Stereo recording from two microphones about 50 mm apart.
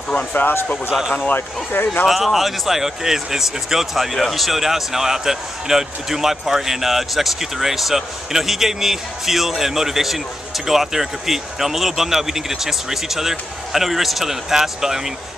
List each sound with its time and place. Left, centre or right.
0.3 s speech: left
2.0 s speech: centre